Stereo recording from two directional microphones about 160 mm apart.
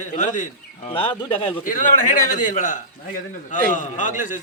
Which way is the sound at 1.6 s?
50° left (ahead or behind).